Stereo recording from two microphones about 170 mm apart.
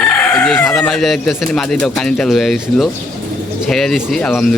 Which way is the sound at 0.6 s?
Centre (ahead or behind).